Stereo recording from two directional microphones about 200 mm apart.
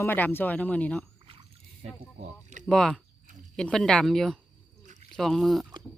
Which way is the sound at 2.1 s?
40° right (ahead or behind).